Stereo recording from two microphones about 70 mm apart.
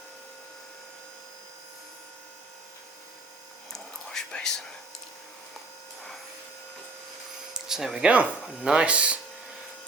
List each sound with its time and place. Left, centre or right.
3.7 s whispering: centre
7.5 s speech: centre